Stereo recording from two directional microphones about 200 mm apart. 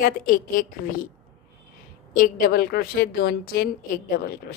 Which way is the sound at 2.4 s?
50° left (ahead or behind).